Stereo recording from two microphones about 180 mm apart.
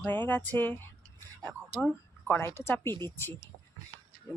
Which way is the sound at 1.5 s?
5° right (ahead or behind).